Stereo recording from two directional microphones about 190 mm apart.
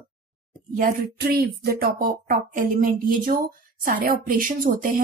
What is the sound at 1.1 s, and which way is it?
Speech, 55° right (ahead or behind).